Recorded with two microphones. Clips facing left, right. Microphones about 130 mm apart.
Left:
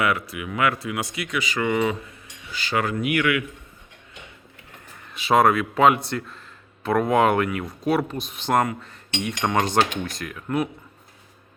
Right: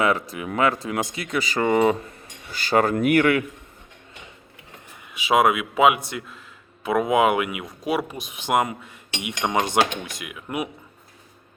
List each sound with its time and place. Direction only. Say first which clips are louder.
0.0 s speech: right 2 dB; 35° right (ahead or behind)
5.1 s speech: left 1 dB; 10° right (ahead or behind)